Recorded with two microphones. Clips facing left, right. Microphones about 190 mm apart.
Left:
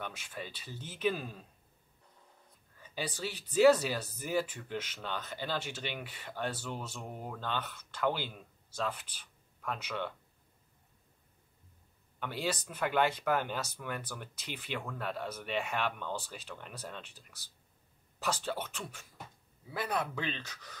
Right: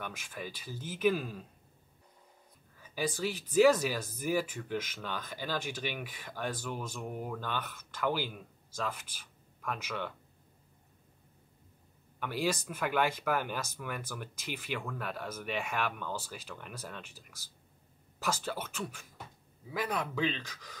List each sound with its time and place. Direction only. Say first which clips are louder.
0.0 s speech: right 1 dB; 10° right (ahead or behind)
2.9 s speech: right 5 dB; 10° right (ahead or behind)
12.2 s speech: right 3 dB; 10° right (ahead or behind)
18.2 s speech: even; 10° right (ahead or behind)